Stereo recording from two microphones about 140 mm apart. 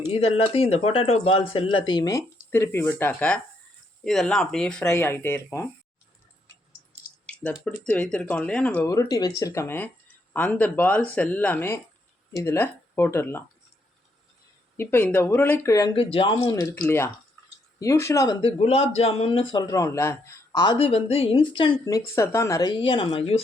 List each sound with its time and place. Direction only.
0.1 s speech: 45° left (ahead or behind); by 4.9 s 5° left (ahead or behind)
4.9 s speech: 15° left (ahead or behind)
7.9 s speech: 10° left (ahead or behind)
8.9 s speech: 25° left (ahead or behind)
14.8 s speech: 15° left (ahead or behind)
16.0 s speech: 40° left (ahead or behind)
16.4 s speech: 25° left (ahead or behind)
17.7 s speech: 20° left (ahead or behind)
18.4 s speech: 50° left (ahead or behind); by 20.6 s 20° left (ahead or behind)
20.7 s speech: 45° left (ahead or behind)
21.9 s speech: 20° left (ahead or behind)
22.7 s speech: 35° left (ahead or behind)